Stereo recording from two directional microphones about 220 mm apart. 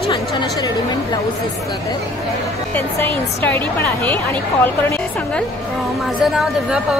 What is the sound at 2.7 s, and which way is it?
Speech, 10° left (ahead or behind).